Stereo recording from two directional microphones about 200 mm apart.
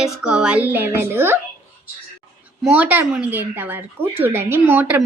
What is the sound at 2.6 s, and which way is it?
A woman's voice, 5° right (ahead or behind).